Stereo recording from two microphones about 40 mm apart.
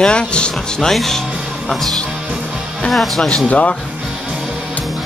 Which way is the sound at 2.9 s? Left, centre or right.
Centre.